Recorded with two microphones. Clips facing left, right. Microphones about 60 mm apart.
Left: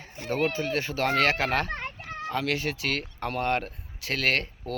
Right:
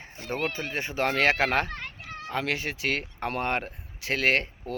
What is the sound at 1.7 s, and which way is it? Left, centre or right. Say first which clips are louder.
Children playing: left 3 dB; left.